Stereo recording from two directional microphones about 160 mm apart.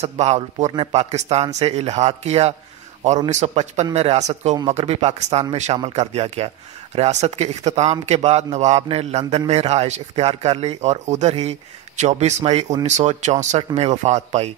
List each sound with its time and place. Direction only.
0.0 s speech: 45° right (ahead or behind)